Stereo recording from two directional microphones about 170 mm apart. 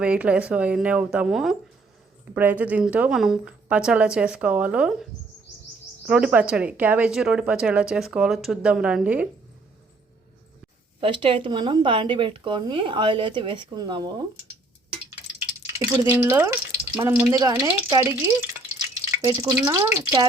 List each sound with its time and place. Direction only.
0.0 s a woman's voice: 5° right (ahead or behind)
6.1 s speech: 5° right (ahead or behind)
11.0 s speech: 30° right (ahead or behind)
15.6 s speech: 15° right (ahead or behind)